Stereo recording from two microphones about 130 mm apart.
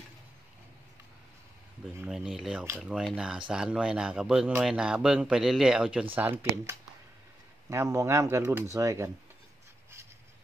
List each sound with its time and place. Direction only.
2.0 s speech: centre (ahead or behind); by 9.1 s 25° right (ahead or behind)